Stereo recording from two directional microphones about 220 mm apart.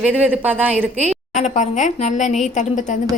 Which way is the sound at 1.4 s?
30° left (ahead or behind).